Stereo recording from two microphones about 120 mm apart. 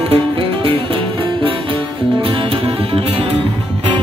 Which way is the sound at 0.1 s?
45° right (ahead or behind).